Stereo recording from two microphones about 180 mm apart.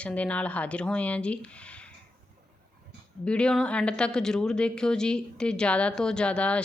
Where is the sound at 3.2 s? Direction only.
5° left (ahead or behind).